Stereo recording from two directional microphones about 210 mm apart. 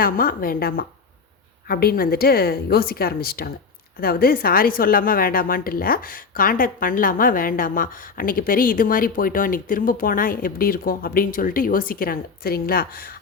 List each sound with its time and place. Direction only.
0.0 s a woman's voice: 45° left (ahead or behind)